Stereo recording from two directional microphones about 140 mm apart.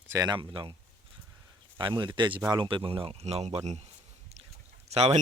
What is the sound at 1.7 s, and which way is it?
Speech, 35° right (ahead or behind).